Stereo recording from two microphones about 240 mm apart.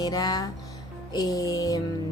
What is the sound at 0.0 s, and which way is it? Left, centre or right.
A woman's voice, centre.